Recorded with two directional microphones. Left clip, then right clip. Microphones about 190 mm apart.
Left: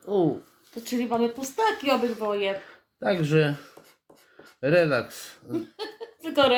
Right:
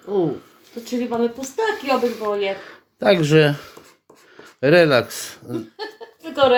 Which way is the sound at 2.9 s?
35° right (ahead or behind).